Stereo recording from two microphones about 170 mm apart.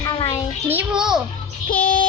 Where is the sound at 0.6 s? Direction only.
10° right (ahead or behind).